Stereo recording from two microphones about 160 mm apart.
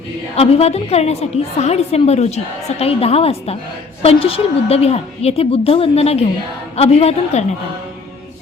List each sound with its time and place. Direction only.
0.3 s a woman's voice: 40° left (ahead or behind)